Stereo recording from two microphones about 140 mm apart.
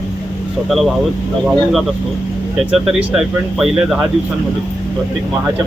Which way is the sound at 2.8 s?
5° right (ahead or behind).